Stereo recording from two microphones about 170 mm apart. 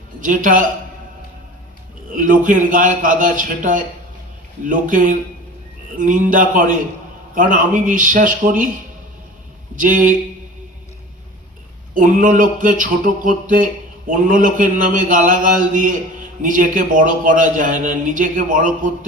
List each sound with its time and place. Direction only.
0.2 s a man's voice: 50° right (ahead or behind)
2.1 s a man's voice: 50° right (ahead or behind)
9.7 s a man's voice: 50° right (ahead or behind)
11.9 s a man's voice: 50° right (ahead or behind)